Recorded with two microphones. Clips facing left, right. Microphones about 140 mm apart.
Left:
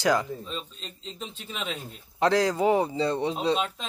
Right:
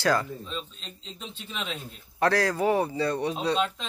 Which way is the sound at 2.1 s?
20° left (ahead or behind).